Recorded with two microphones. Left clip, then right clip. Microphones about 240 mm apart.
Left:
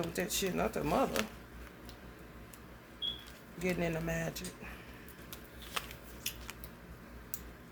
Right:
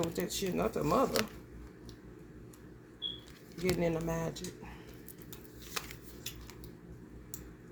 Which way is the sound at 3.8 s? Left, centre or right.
Centre.